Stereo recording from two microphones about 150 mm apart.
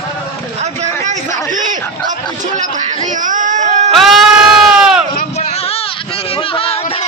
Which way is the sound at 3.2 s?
60° right (ahead or behind).